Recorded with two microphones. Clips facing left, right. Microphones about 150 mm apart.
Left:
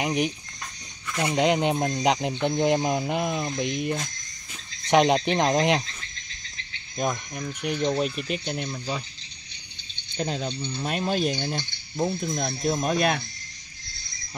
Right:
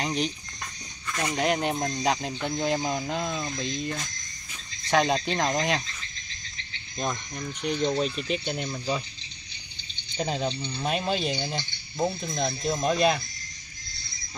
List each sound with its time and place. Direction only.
0.0 s speech: 15° left (ahead or behind)
7.0 s speech: 10° left (ahead or behind)
10.1 s speech: 5° right (ahead or behind)